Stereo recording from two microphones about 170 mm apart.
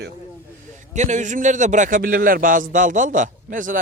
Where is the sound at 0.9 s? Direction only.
45° right (ahead or behind).